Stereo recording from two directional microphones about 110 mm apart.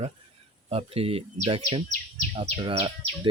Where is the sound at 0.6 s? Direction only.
65° right (ahead or behind).